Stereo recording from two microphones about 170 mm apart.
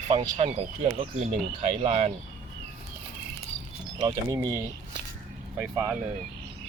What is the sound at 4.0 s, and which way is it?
Speech, 25° right (ahead or behind).